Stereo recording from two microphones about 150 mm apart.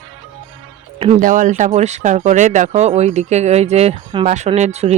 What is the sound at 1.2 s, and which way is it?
Speech, 60° right (ahead or behind).